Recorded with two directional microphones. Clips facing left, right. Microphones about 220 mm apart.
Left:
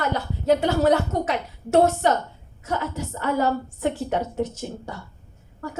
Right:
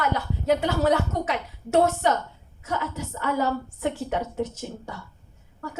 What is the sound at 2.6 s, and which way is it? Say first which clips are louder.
A woman's voice: left 2 dB; 40° left (ahead or behind).